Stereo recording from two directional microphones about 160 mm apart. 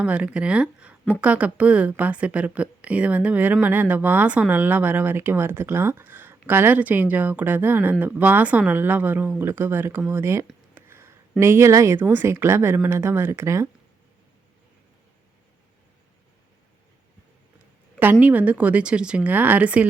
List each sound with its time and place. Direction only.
0.0 s a woman's voice: 5° right (ahead or behind)
18.0 s a woman's voice: 10° right (ahead or behind)